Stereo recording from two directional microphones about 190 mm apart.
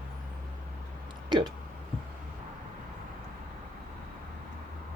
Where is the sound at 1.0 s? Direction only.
25° right (ahead or behind).